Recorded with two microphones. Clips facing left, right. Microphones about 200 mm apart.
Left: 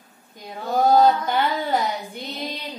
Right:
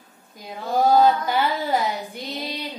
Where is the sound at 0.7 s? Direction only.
Centre (ahead or behind).